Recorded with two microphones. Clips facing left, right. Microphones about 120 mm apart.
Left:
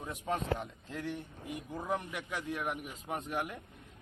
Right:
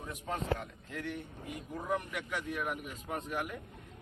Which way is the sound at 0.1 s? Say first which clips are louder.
Left 1 dB; 25° left (ahead or behind).